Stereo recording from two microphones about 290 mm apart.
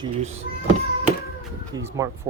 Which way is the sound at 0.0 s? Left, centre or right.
Right.